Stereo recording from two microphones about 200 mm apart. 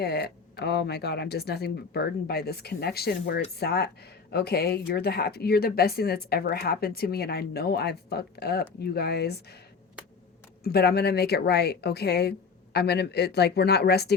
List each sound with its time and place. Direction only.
0.0 s speech: 55° left (ahead or behind)
10.6 s speech: 50° left (ahead or behind)